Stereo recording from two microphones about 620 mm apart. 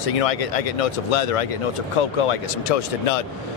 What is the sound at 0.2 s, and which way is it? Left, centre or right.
Speech, left.